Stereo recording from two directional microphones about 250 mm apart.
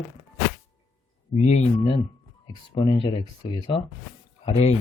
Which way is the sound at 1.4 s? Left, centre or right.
Left.